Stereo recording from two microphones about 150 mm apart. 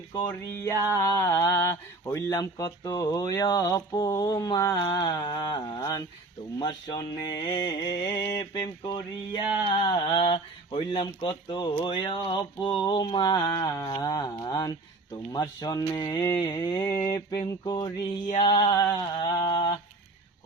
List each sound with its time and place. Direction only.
0.1 s mantra: 25° left (ahead or behind)
9.6 s speech: 30° left (ahead or behind)
12.8 s mantra: 30° left (ahead or behind)
16.2 s a sound: 20° left (ahead or behind)
16.5 s mantra: 25° left (ahead or behind)